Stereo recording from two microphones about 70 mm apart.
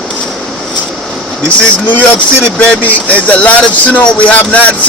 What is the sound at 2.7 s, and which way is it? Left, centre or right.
Speech, left.